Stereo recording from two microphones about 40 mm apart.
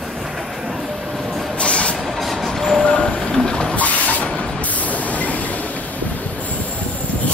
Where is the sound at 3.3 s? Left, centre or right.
Left.